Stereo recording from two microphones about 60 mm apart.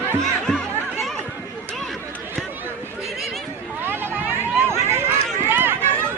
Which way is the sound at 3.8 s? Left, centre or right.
Right.